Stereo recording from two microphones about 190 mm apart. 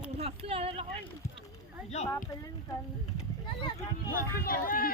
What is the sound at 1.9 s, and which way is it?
Speech, 35° left (ahead or behind).